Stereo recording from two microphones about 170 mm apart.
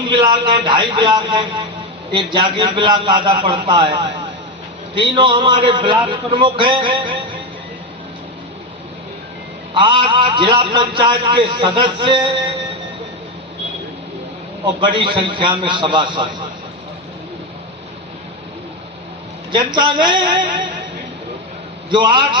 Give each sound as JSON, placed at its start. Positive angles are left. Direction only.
{"t": 0.0, "sound": "a man's voice", "side_deg": -30}
{"t": 9.7, "sound": "a man's voice", "side_deg": -30}
{"t": 14.6, "sound": "a man's voice", "side_deg": -25}
{"t": 19.5, "sound": "a man's voice", "side_deg": -25}
{"t": 21.9, "sound": "a man's voice", "side_deg": -25}